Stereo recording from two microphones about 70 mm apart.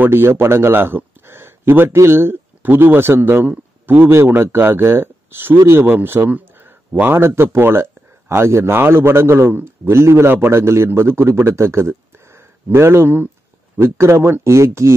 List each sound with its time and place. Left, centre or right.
0.0 s a man's voice: right